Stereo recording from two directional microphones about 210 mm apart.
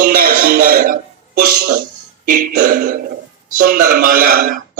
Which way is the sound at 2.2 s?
40° right (ahead or behind).